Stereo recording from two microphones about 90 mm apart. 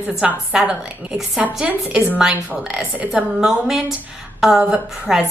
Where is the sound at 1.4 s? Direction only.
15° right (ahead or behind).